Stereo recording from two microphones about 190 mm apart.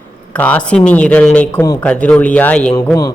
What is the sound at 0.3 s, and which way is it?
A man's voice, 10° left (ahead or behind).